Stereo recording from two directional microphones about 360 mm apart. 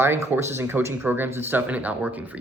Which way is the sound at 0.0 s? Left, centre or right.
Centre.